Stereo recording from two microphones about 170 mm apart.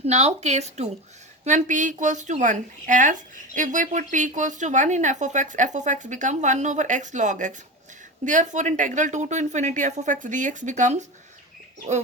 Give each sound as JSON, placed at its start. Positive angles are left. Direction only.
{"t": 0.0, "sound": "a woman's voice", "side_deg": -40}